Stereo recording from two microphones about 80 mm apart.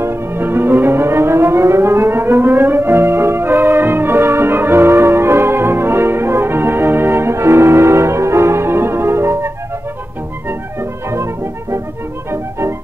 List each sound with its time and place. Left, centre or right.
0.0 s civil defense siren: right
10.8 s music: right
12.3 s music: right